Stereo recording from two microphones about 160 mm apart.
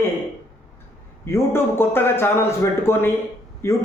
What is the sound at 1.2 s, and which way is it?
A man's voice, 15° left (ahead or behind).